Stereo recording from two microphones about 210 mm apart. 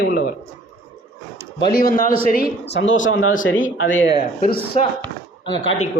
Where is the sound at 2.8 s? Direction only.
65° left (ahead or behind).